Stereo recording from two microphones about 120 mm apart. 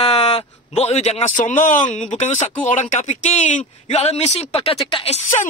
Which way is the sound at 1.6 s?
90° left.